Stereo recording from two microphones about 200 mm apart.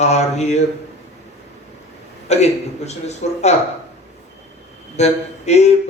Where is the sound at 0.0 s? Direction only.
35° left (ahead or behind).